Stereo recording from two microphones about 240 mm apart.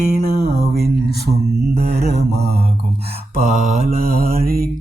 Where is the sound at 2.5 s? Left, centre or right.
Right.